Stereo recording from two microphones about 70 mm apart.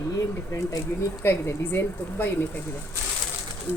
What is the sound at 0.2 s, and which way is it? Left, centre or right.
Speech, left.